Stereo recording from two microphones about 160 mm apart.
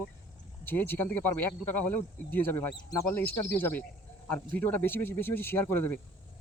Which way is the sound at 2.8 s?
20° left (ahead or behind).